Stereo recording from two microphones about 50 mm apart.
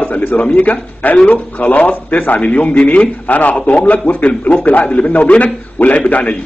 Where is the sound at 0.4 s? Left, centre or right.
Left.